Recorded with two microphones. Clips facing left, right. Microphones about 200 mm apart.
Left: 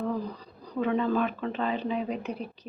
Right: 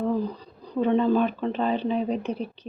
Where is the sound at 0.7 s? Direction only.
30° right (ahead or behind).